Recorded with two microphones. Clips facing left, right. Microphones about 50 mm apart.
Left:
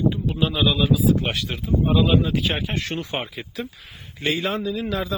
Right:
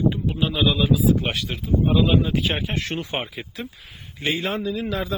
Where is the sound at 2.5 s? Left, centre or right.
Centre.